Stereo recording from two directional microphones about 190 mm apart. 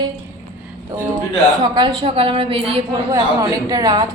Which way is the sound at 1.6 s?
20° right (ahead or behind).